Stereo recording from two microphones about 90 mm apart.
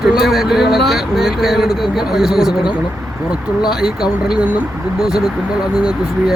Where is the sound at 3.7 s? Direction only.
5° right (ahead or behind).